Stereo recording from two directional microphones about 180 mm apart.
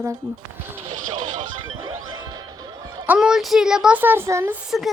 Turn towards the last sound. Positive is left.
turn(degrees=0)  # may be behind; listen again after turning